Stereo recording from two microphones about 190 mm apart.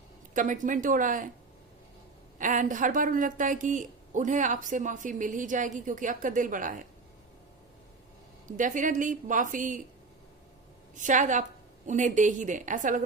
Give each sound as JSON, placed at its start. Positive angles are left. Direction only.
{"t": 0.3, "sound": "a woman's voice", "side_deg": -45}
{"t": 2.4, "sound": "a woman's voice", "side_deg": -45}
{"t": 8.4, "sound": "a woman's voice", "side_deg": -40}
{"t": 10.9, "sound": "a woman's voice", "side_deg": -40}